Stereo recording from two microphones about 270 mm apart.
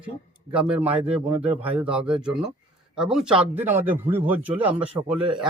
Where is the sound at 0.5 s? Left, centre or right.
Centre.